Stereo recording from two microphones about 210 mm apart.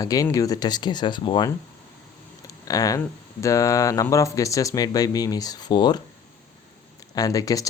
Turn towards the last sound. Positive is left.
turn(degrees=15)  # may be behind; listen again after turning